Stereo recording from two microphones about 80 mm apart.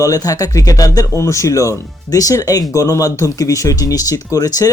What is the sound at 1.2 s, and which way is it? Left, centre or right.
Speech, left.